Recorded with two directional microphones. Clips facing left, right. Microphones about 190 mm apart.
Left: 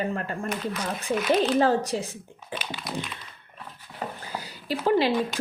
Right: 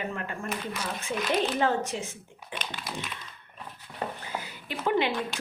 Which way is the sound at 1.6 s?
35° left (ahead or behind).